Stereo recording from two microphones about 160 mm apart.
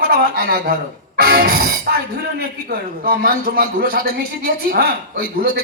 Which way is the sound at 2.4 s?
70° right (ahead or behind).